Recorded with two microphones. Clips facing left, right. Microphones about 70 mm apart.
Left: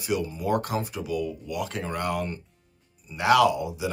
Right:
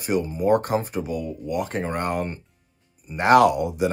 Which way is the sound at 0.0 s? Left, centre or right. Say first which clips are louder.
Right 5 dB; right.